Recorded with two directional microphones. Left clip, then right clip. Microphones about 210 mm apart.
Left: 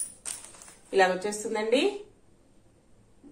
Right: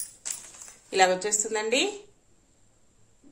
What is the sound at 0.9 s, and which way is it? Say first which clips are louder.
Speech: right 1 dB; 50° right (ahead or behind).